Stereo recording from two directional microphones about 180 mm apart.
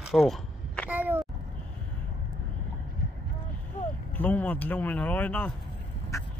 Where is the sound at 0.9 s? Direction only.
10° right (ahead or behind).